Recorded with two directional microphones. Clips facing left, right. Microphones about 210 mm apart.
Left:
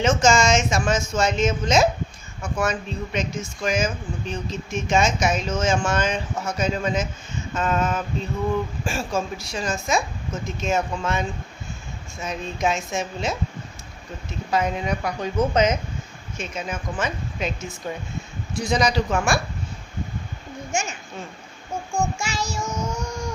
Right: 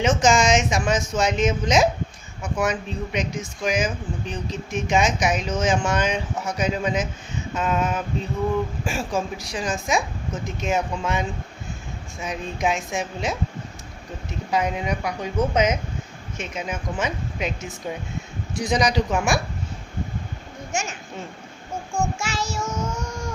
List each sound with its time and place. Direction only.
0.0 s speech: 15° right (ahead or behind)
14.5 s speech: 15° right (ahead or behind)
21.9 s child singing: 5° right (ahead or behind)